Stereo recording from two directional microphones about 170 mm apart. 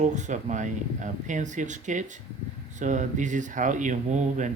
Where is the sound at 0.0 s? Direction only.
45° right (ahead or behind).